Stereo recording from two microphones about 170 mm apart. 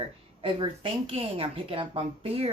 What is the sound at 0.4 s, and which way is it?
A woman's voice, 30° right (ahead or behind).